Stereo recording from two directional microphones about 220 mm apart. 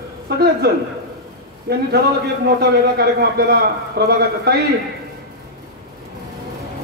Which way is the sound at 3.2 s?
45° right (ahead or behind).